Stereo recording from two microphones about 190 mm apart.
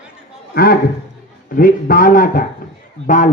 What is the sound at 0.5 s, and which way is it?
A man's voice, 50° left (ahead or behind).